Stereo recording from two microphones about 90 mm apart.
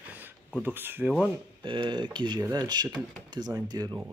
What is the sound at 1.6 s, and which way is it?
Speech, 65° right (ahead or behind).